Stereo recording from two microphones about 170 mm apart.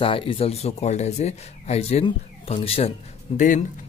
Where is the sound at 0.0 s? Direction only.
30° left (ahead or behind).